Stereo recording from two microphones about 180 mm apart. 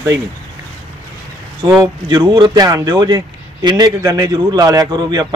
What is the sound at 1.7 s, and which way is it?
Speech, 20° right (ahead or behind).